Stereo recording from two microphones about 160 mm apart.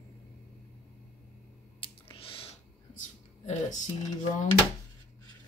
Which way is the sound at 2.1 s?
35° left (ahead or behind).